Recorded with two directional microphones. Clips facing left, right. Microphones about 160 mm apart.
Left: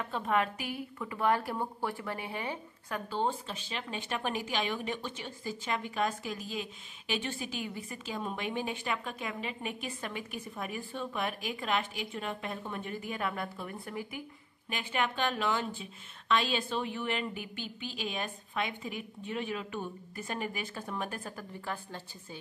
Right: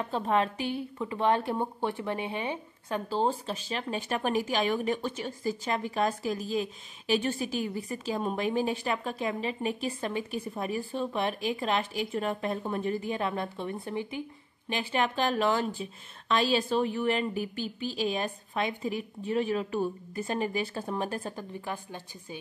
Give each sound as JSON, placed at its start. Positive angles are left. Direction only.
{"t": 0.0, "sound": "speech", "side_deg": -30}
{"t": 3.1, "sound": "speech", "side_deg": -35}
{"t": 21.5, "sound": "speech", "side_deg": -15}